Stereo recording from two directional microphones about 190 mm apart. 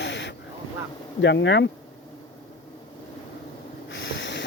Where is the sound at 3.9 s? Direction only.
70° left (ahead or behind).